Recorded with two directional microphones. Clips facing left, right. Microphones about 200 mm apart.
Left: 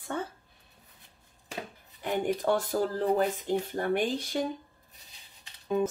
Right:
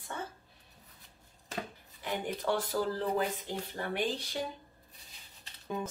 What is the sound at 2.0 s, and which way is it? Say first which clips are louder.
Speech: left 6 dB; 45° left (ahead or behind).